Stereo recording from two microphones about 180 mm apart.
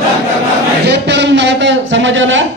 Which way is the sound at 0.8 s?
70° right (ahead or behind).